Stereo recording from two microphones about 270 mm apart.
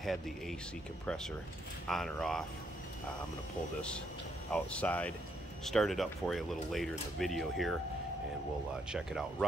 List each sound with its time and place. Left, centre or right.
0.0 s speech: centre
4.5 s speech: centre
8.9 s speech: centre